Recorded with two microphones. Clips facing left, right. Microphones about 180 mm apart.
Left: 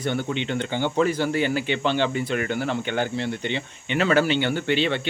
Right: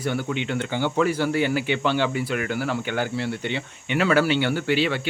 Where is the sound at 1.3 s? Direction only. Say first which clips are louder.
Right 1 dB; 10° right (ahead or behind).